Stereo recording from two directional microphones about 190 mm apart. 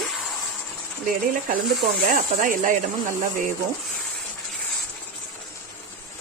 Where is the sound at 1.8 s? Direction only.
45° right (ahead or behind).